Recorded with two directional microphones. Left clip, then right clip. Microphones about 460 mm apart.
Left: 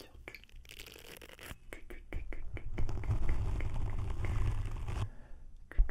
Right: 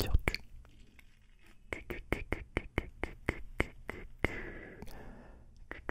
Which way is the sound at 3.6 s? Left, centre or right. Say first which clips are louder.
Right 12 dB; right.